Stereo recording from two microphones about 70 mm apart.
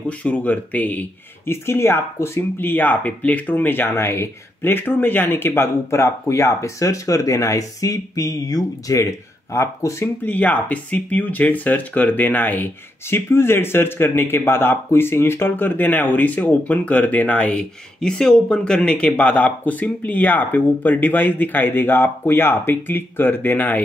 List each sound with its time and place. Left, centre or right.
0.2 s speech: left
1.5 s speech: left
10.2 s speech: left
18.0 s speech: centre; by 23.8 s left